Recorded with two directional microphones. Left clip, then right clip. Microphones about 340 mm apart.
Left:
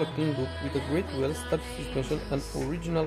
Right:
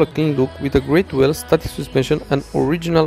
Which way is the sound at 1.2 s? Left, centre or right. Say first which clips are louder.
Right 14 dB; right.